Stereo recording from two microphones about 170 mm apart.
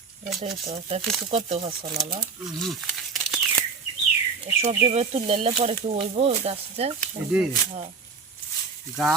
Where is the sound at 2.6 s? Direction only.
Centre (ahead or behind).